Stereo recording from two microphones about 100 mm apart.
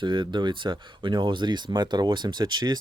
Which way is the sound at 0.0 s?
50° right (ahead or behind).